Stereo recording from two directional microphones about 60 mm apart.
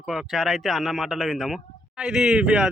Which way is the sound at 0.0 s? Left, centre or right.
Centre.